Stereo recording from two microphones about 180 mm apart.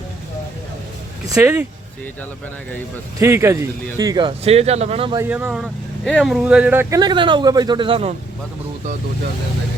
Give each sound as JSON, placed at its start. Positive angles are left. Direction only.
{"t": 1.3, "sound": "speech", "side_deg": -10}
{"t": 3.2, "sound": "speech", "side_deg": -15}
{"t": 5.1, "sound": "speech", "side_deg": -10}
{"t": 7.0, "sound": "speech", "side_deg": -25}